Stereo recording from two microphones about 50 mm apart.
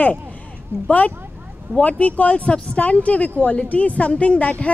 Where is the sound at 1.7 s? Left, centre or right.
Left.